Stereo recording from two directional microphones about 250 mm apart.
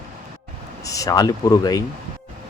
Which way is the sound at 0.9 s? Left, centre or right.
Centre.